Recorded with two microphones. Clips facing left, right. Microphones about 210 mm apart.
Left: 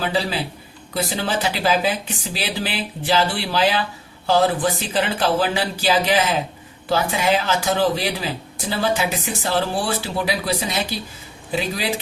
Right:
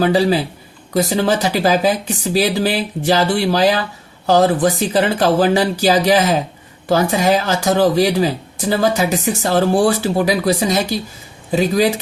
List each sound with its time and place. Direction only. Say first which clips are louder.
0.0 s speech: right 9 dB; 40° right (ahead or behind)